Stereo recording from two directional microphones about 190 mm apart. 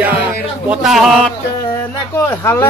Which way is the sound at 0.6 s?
Centre (ahead or behind).